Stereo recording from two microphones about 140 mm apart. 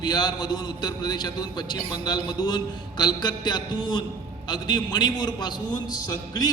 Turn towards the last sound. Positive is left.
turn(degrees=30)  # may be behind; listen again after turning